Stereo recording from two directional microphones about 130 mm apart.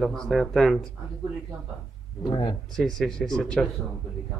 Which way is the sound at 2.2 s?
35° left (ahead or behind).